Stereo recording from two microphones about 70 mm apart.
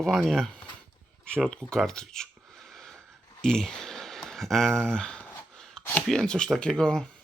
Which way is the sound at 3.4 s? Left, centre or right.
Centre.